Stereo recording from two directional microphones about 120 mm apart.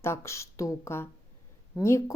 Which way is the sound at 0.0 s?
20° left (ahead or behind).